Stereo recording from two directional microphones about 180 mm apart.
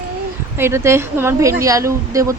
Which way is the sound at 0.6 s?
15° right (ahead or behind).